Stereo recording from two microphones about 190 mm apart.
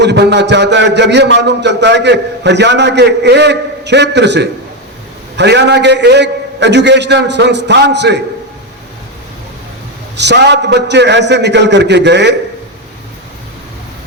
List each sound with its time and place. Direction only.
0.0 s a man's voice: 65° right (ahead or behind)
10.2 s a man's voice: 65° right (ahead or behind)